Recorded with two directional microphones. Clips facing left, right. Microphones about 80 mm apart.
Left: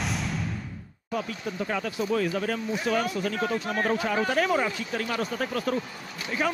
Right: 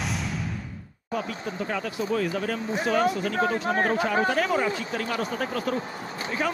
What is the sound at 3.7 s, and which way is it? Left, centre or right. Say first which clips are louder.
Speech: right 3 dB; right.